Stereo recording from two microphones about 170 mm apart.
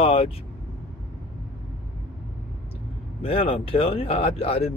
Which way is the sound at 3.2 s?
35° left (ahead or behind).